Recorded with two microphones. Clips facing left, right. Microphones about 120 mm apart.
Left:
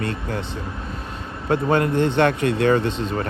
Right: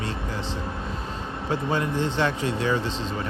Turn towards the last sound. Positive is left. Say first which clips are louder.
# left 7 dB
turn(degrees=55)  # may be behind; listen again after turning